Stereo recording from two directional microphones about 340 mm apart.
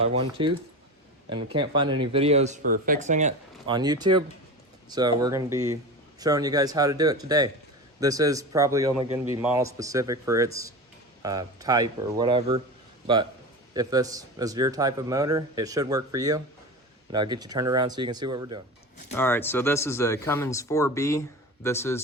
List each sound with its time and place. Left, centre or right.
0.0 s speech: centre
13.7 s speech: centre
19.1 s speech: centre